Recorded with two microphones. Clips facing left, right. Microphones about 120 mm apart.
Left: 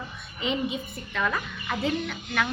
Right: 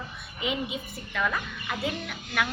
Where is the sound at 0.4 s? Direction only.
5° right (ahead or behind).